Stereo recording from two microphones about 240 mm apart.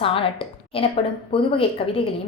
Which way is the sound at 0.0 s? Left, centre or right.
Left.